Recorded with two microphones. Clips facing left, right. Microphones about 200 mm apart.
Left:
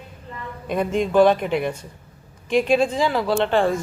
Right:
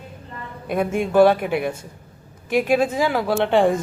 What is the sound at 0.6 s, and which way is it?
A man's voice, 10° right (ahead or behind).